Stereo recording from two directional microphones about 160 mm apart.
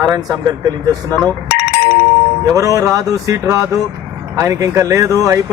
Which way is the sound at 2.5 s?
20° right (ahead or behind).